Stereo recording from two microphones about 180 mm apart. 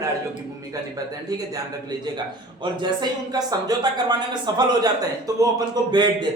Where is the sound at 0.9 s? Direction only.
20° right (ahead or behind).